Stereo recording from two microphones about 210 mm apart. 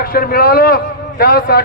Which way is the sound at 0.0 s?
45° left (ahead or behind).